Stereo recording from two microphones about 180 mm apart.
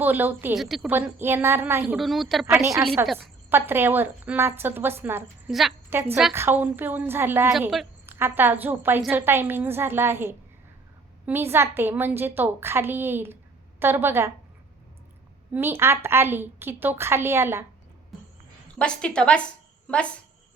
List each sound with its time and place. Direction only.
0.0 s a woman's voice: 10° right (ahead or behind)
2.6 s a woman's voice: 15° right (ahead or behind)
5.5 s a woman's voice: centre (ahead or behind)
5.9 s a woman's voice: 10° right (ahead or behind)
15.5 s a woman's voice: 10° right (ahead or behind)
18.8 s a woman's voice: 5° left (ahead or behind)